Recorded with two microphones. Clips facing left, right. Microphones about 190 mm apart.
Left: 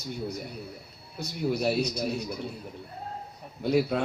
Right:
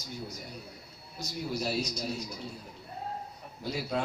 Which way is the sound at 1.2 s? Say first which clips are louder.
Left 6 dB; 60° left (ahead or behind).